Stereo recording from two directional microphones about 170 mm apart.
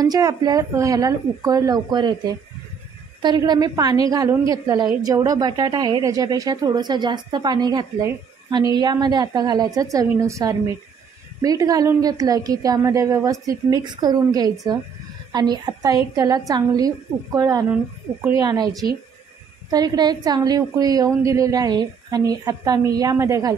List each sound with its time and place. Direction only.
0.0 s speech: 20° right (ahead or behind)